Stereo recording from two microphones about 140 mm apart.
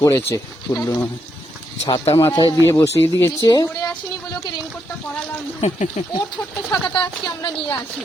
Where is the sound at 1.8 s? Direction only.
40° left (ahead or behind).